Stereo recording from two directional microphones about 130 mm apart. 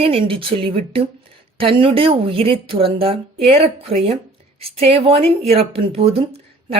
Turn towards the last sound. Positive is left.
turn(degrees=-45)  # may be behind; listen again after turning